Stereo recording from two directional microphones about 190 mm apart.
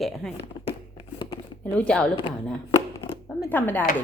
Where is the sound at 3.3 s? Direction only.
10° left (ahead or behind).